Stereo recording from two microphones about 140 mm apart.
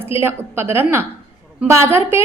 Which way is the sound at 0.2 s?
15° right (ahead or behind).